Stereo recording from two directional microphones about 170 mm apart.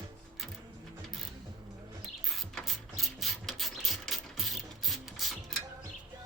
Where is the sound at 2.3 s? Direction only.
Centre (ahead or behind).